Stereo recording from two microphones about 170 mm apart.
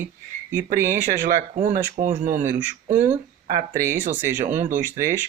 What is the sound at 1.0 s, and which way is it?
Speech, 50° right (ahead or behind).